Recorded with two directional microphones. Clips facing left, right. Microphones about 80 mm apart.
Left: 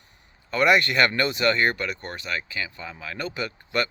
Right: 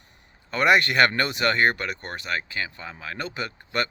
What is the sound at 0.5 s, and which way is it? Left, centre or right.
Speech, right.